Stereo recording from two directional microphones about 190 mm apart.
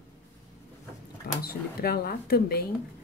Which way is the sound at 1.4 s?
55° left (ahead or behind).